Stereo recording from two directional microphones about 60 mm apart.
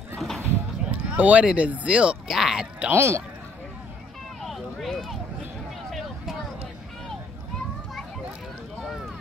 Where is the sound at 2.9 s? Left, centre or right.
Right.